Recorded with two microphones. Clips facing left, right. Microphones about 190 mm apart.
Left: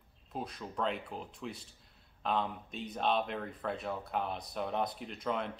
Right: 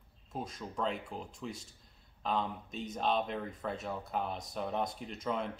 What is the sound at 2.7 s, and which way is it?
Speech, 40° right (ahead or behind).